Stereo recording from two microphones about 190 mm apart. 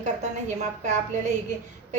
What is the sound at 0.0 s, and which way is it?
Speech, 40° right (ahead or behind).